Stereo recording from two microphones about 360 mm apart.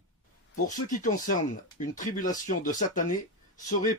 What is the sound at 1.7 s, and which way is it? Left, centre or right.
Speech, left.